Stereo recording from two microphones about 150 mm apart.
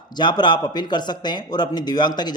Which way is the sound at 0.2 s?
30° left (ahead or behind).